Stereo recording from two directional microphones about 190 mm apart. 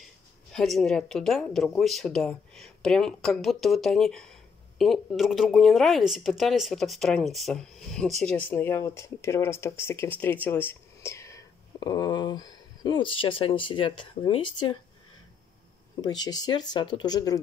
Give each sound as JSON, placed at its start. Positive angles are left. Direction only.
{"t": 0.5, "sound": "speech", "side_deg": 0}
{"t": 16.0, "sound": "speech", "side_deg": 20}